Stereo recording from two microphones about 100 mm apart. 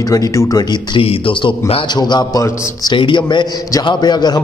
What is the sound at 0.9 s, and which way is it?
Speech, 65° left (ahead or behind).